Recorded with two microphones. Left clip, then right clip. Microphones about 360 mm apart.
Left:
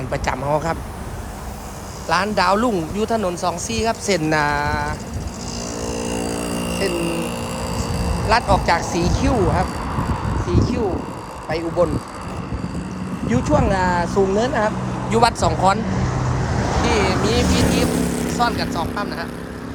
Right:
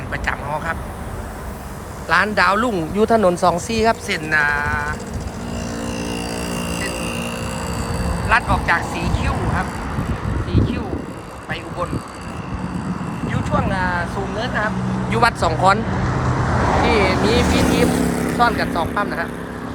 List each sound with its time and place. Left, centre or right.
0.1 s speech: centre
2.0 s speech: centre
5.8 s a sound: left
7.0 s vehicle: centre
13.3 s speech: left
16.8 s speech: centre